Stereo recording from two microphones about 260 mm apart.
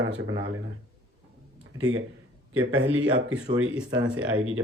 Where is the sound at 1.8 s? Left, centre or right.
Right.